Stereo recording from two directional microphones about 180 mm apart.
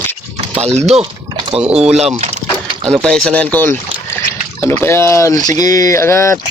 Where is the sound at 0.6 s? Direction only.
40° right (ahead or behind).